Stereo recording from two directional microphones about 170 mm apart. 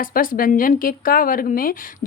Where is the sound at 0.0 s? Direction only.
55° left (ahead or behind).